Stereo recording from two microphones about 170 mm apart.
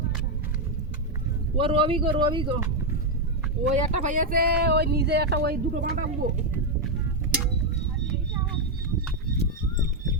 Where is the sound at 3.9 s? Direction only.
45° right (ahead or behind); by 5.5 s 75° right (ahead or behind).